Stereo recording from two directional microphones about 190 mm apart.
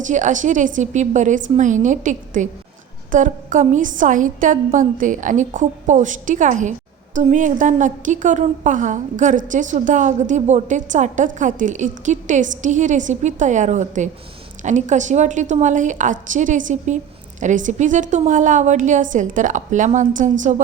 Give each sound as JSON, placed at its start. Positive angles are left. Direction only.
{"t": 0.0, "sound": "a woman's voice", "side_deg": -40}